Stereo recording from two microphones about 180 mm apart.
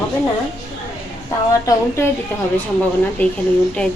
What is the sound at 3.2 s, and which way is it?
Speech, 10° left (ahead or behind).